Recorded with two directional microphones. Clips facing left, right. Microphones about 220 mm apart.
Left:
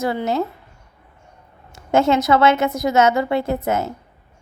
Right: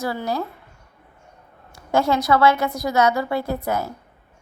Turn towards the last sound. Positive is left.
turn(degrees=20)  # may be behind; listen again after turning